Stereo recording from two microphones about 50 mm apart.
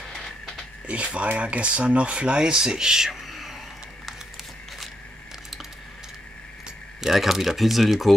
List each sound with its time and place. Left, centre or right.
0.8 s speech: right; by 3.5 s centre
7.0 s speech: centre